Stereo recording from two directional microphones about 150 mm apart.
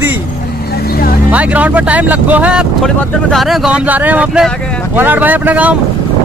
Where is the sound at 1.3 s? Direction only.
10° right (ahead or behind).